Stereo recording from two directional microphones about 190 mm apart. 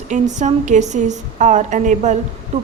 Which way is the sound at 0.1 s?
40° right (ahead or behind).